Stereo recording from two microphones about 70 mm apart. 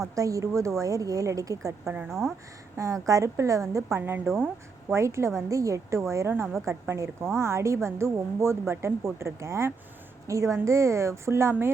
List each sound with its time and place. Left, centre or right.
0.2 s a woman's voice: right
2.0 s speech: centre
2.7 s a woman's voice: right